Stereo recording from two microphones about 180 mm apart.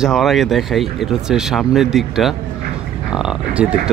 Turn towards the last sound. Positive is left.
turn(degrees=-5)  # may be behind; listen again after turning